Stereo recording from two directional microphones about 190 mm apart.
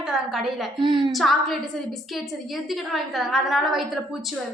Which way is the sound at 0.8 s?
25° right (ahead or behind).